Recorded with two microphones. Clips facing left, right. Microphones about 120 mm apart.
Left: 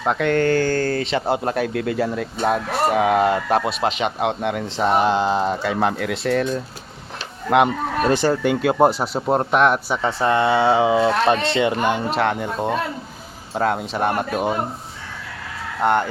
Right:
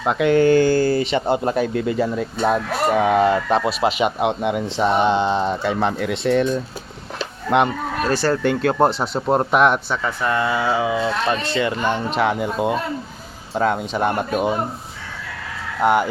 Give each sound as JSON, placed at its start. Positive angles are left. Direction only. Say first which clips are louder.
{"t": 0.0, "sound": "speech", "louder": "right 3 dB", "side_deg": -5}
{"t": 8.0, "sound": "speech", "louder": "left 1 dB", "side_deg": 15}
{"t": 10.0, "sound": "speech", "louder": "left 3 dB", "side_deg": 30}
{"t": 12.1, "sound": "speech", "louder": "right 1 dB", "side_deg": -5}
{"t": 15.8, "sound": "speech", "louder": "right 2 dB", "side_deg": -5}